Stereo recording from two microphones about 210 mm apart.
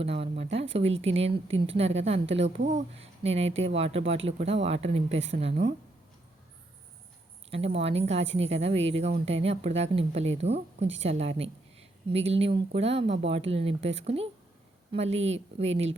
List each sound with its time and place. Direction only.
0.0 s a woman's voice: 30° right (ahead or behind)
3.5 s speech: 65° right (ahead or behind)
3.8 s a woman's voice: 30° right (ahead or behind)
7.5 s a woman's voice: 30° right (ahead or behind)
15.3 s a woman's voice: 30° right (ahead or behind)